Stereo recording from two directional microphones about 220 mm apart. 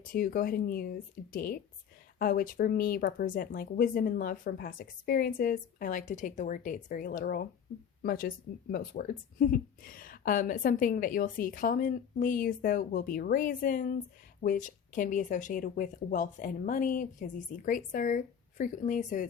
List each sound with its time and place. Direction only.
0.0 s speech: 40° left (ahead or behind)